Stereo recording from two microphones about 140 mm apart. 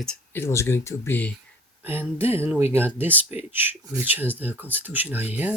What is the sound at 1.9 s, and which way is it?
Speech, 15° right (ahead or behind).